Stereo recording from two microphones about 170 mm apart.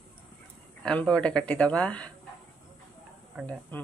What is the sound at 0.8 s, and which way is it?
Speech, 5° left (ahead or behind).